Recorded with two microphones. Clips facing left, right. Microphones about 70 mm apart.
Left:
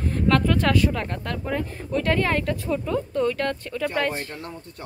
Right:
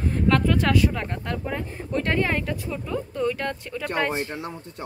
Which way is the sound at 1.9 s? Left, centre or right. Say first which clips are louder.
Left 1 dB; right.